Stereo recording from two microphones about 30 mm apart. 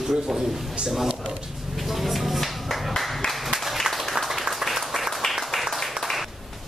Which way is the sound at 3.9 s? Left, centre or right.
Centre.